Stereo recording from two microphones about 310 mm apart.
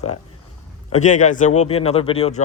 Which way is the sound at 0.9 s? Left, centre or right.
Left.